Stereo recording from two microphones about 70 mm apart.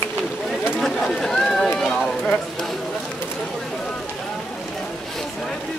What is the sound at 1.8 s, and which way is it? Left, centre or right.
Run, centre.